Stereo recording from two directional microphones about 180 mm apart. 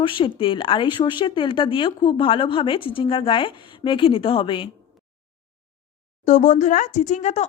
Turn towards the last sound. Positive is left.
turn(degrees=40)  # may be behind; listen again after turning